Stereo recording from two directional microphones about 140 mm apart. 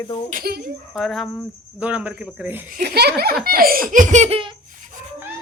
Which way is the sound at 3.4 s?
90° right.